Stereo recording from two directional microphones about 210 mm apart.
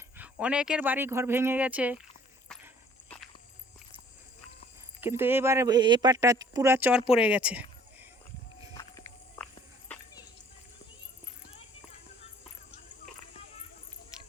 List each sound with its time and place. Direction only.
0.2 s speech: 5° right (ahead or behind)
4.9 s speech: 10° right (ahead or behind)
8.7 s walk: 15° left (ahead or behind)